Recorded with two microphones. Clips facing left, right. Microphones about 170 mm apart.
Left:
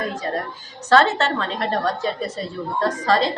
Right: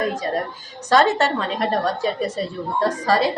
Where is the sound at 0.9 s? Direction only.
15° right (ahead or behind).